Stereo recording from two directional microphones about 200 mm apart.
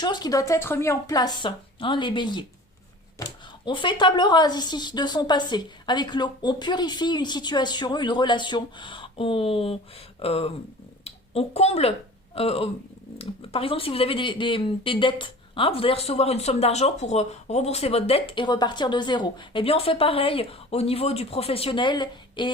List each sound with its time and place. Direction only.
0.0 s speech: 20° left (ahead or behind)